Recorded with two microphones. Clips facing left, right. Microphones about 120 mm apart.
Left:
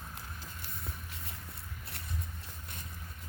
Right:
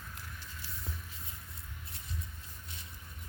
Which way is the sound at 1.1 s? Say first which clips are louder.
Left 3 dB; 70° left (ahead or behind).